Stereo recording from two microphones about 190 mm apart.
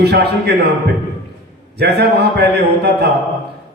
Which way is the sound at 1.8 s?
60° right (ahead or behind).